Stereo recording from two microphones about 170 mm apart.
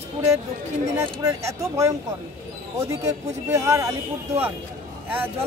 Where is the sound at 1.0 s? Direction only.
20° right (ahead or behind).